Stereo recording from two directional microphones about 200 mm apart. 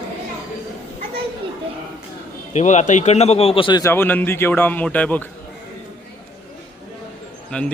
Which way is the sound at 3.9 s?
10° left (ahead or behind).